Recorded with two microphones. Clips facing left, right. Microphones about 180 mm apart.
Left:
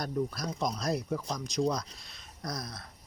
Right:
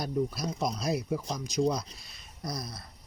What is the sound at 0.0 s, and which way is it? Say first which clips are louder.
Speech: right 2 dB; 10° right (ahead or behind).